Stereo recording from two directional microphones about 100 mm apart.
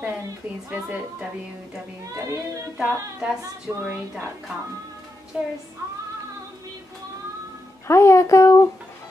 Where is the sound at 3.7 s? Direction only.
15° right (ahead or behind).